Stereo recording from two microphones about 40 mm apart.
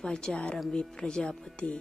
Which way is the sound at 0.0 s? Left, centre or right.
Centre.